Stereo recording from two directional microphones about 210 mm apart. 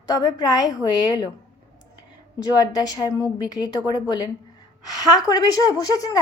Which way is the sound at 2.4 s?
20° left (ahead or behind).